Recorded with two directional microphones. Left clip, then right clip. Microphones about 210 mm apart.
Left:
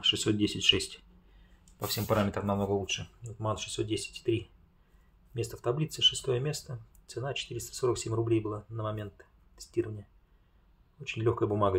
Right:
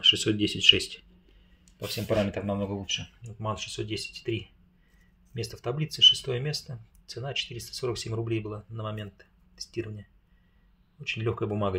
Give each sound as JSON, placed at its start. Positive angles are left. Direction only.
{"t": 0.0, "sound": "speech", "side_deg": 0}
{"t": 2.0, "sound": "speech", "side_deg": 15}
{"t": 2.8, "sound": "speech", "side_deg": -5}
{"t": 11.1, "sound": "speech", "side_deg": -5}